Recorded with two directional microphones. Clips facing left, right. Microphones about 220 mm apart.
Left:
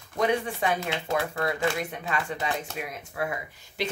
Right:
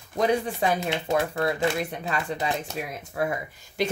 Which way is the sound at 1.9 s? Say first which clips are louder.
Right 2 dB; 35° right (ahead or behind).